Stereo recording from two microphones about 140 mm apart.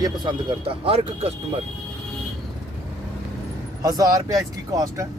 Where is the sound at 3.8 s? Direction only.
25° right (ahead or behind).